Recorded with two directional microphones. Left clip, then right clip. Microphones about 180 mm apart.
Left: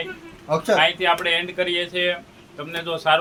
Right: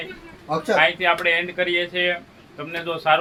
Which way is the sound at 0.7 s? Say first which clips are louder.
Right 1 dB; centre (ahead or behind).